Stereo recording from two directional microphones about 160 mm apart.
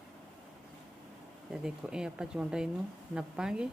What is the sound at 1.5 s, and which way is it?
Speech, 5° right (ahead or behind).